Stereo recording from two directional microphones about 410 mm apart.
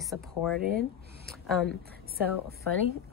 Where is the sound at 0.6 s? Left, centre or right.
Right.